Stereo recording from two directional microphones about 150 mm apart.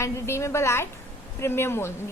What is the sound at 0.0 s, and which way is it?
A woman's voice, 20° left (ahead or behind).